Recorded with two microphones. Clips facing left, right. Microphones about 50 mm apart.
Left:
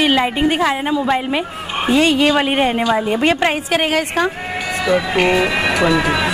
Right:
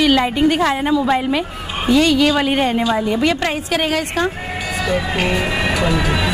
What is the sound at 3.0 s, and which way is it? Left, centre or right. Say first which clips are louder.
A woman's voice: left 2 dB; left.